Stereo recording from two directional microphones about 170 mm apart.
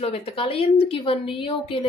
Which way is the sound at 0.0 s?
35° left (ahead or behind).